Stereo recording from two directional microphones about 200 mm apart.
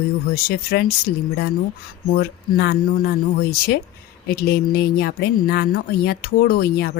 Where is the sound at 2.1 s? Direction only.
50° left (ahead or behind).